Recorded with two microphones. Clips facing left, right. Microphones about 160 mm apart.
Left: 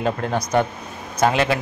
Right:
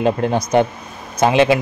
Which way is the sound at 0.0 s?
20° right (ahead or behind).